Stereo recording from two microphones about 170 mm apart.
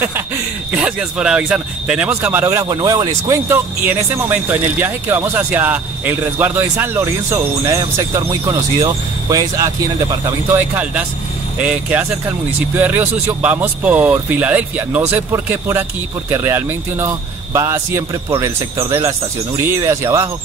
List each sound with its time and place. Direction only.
0.7 s speech: 5° right (ahead or behind)
10.5 s speech: 10° right (ahead or behind)